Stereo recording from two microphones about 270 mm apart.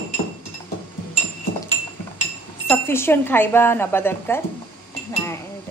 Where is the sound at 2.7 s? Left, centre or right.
Centre.